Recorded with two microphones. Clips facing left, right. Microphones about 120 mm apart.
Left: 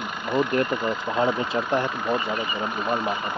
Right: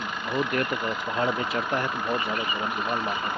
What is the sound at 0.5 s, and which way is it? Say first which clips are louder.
Speech: left 4 dB; 30° left (ahead or behind).